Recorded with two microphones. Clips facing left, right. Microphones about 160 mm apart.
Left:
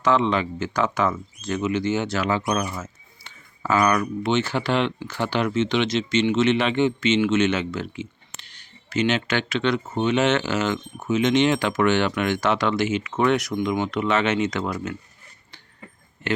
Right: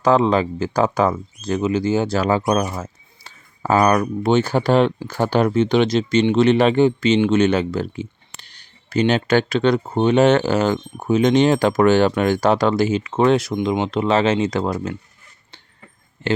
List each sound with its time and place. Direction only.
0.0 s speech: 35° right (ahead or behind)